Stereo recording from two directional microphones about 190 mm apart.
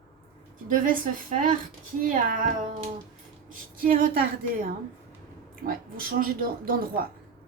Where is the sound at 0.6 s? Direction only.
45° right (ahead or behind).